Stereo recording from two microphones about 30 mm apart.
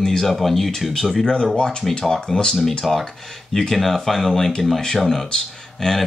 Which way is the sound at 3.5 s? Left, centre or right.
Centre.